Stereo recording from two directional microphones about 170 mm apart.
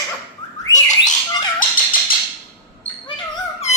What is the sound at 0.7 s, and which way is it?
Bird, 45° left (ahead or behind).